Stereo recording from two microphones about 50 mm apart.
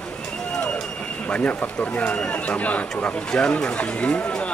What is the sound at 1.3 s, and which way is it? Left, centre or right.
Speech, left.